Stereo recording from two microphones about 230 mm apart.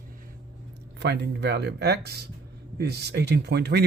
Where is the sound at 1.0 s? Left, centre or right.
Right.